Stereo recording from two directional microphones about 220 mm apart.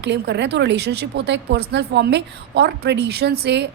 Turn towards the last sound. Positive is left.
turn(degrees=-50)  # may be behind; listen again after turning